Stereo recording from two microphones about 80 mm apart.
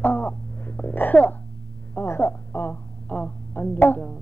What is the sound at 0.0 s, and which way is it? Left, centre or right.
Wail, centre.